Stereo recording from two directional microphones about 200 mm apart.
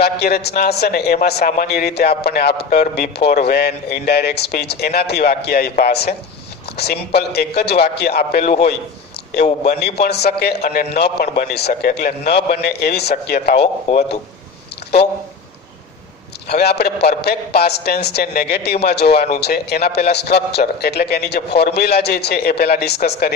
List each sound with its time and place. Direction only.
0.0 s a man's voice: 50° left (ahead or behind)
9.8 s a man's voice: 55° left (ahead or behind)
16.5 s a man's voice: 55° left (ahead or behind)